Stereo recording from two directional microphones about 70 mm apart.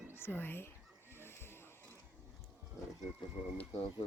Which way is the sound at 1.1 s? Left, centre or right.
Left.